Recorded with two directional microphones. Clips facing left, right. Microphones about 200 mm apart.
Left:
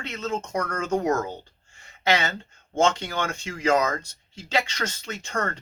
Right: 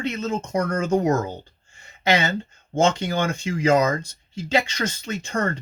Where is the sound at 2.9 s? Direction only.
10° right (ahead or behind).